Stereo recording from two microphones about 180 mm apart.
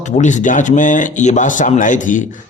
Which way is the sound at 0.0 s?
40° left (ahead or behind).